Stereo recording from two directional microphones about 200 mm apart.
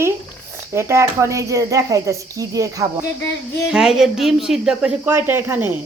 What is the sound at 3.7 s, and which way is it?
Speech, centre (ahead or behind).